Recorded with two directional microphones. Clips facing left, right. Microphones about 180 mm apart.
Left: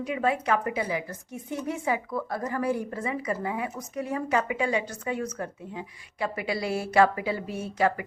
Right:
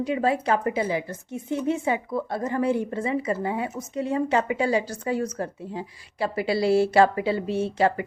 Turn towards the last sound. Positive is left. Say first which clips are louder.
# right 4 dB
turn(degrees=-30)  # may be behind; listen again after turning